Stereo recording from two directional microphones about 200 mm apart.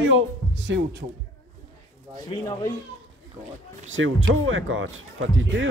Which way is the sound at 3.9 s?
75° right (ahead or behind).